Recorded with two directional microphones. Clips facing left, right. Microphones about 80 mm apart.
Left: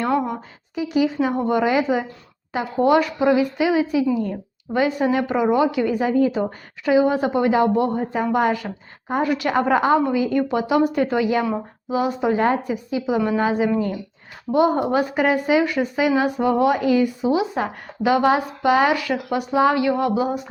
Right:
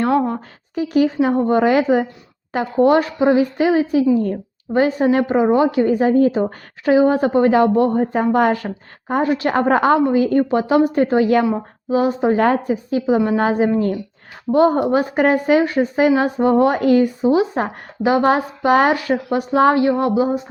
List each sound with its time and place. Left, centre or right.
0.8 s a woman's voice: right
1.3 s speech: right
1.6 s a woman's voice: right
2.8 s speech: right
3.6 s speech: right
4.7 s a woman's voice: right
9.2 s speech: right
9.5 s a woman's voice: right
12.4 s a woman's voice: right
12.7 s a woman's voice: right
14.8 s speech: right
15.1 s a woman's voice: right